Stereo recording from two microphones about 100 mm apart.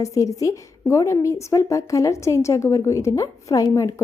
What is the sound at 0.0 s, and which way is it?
A woman's voice, 35° left (ahead or behind).